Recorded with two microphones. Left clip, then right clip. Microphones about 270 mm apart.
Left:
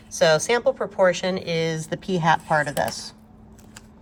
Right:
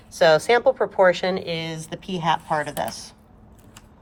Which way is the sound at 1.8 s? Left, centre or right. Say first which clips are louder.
Left 4 dB; left.